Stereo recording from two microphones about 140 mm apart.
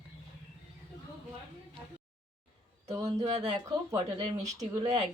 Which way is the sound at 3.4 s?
25° right (ahead or behind).